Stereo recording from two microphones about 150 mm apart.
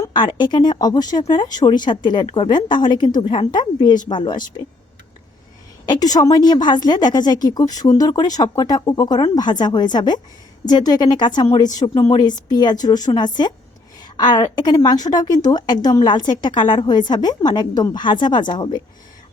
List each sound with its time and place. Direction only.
0.0 s a woman's voice: 30° left (ahead or behind)
6.1 s a woman's voice: 25° left (ahead or behind)